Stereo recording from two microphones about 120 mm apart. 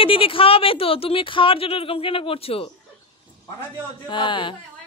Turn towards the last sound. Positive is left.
turn(degrees=40)  # may be behind; listen again after turning